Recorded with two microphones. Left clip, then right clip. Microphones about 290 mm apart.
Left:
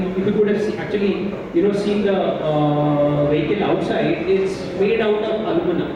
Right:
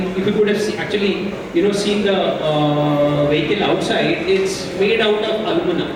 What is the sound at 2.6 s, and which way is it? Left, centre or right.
Mantra, left.